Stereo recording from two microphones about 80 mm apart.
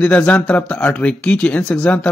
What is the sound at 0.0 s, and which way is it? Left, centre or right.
Speech, centre.